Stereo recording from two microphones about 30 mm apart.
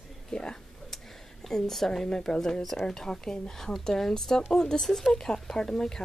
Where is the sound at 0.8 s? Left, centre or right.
Centre.